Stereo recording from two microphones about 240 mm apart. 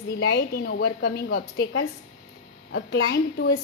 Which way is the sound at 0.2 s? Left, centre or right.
Left.